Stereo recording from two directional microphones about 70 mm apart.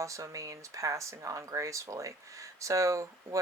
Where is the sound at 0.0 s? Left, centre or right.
Right.